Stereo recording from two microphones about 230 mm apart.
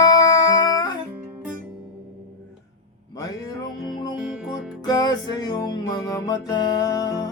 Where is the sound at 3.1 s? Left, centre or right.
Centre.